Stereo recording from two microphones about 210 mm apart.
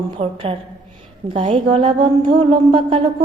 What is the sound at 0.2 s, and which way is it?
Speech, 25° right (ahead or behind).